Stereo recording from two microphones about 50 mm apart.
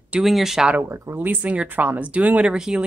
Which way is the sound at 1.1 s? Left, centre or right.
Right.